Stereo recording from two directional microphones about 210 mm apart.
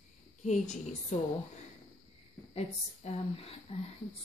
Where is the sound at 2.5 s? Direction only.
30° left (ahead or behind).